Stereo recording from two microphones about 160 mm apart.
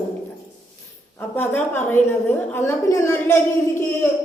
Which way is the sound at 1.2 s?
10° left (ahead or behind).